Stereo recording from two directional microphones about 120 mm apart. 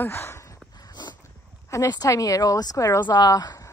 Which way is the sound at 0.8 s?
35° left (ahead or behind).